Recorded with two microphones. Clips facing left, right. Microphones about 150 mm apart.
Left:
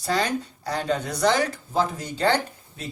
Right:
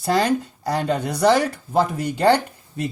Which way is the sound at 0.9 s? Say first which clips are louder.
Right 4 dB; 60° right (ahead or behind).